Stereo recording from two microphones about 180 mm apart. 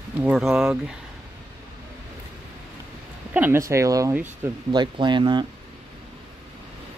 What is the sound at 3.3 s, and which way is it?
Speech, 10° right (ahead or behind).